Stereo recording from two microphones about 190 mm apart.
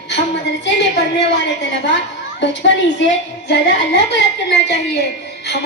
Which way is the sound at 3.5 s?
65° left (ahead or behind).